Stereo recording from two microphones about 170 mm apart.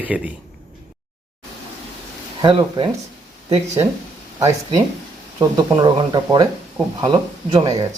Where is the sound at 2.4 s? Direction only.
25° right (ahead or behind).